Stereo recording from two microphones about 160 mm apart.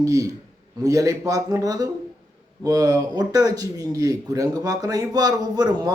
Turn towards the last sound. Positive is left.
turn(degrees=-25)  # may be behind; listen again after turning